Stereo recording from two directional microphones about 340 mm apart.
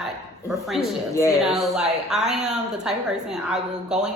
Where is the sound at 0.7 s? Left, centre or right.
Centre.